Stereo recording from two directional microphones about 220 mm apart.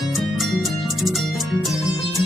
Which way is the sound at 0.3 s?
Centre (ahead or behind).